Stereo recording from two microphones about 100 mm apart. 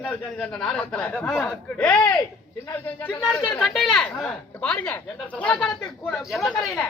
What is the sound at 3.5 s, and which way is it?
A woman's voice, centre (ahead or behind).